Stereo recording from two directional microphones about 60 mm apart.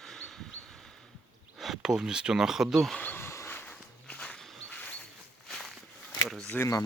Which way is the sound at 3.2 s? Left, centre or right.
Left.